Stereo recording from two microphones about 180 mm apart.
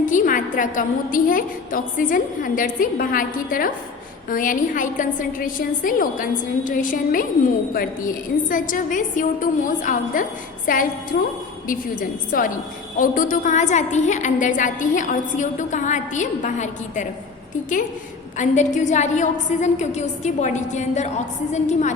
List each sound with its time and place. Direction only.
0.0 s a woman's voice: 45° left (ahead or behind)
18.3 s a woman's voice: 40° left (ahead or behind)